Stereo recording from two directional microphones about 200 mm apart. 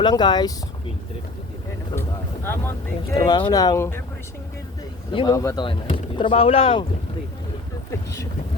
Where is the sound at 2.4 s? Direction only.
10° left (ahead or behind).